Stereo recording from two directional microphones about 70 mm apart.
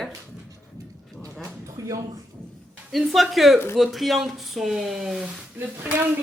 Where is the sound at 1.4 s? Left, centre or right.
Right.